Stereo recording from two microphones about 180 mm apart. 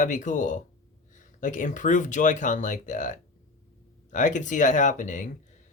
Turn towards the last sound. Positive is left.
turn(degrees=45)  # may be behind; listen again after turning